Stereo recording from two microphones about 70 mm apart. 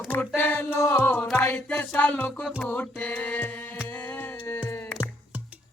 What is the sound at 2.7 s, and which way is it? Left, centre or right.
Music, left.